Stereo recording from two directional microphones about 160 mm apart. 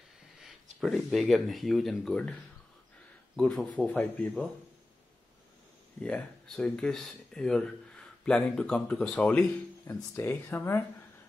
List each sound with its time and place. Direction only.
0.4 s speech: centre (ahead or behind)
3.3 s speech: 5° left (ahead or behind)
5.9 s speech: 5° left (ahead or behind)